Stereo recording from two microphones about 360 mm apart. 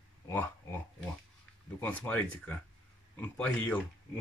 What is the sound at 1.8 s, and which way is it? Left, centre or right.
Speech, centre.